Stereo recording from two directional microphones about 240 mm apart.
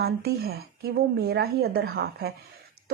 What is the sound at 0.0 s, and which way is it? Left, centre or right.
Speech, right.